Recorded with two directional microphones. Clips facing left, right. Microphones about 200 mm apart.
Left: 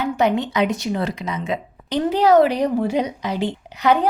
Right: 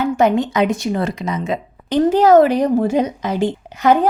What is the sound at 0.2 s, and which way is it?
A woman's voice, 45° right (ahead or behind).